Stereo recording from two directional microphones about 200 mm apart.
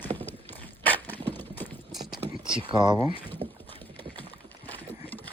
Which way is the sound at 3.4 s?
30° right (ahead or behind).